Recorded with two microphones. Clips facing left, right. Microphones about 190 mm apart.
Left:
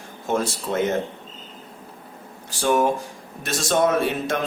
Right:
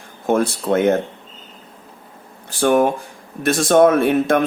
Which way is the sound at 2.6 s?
55° right (ahead or behind).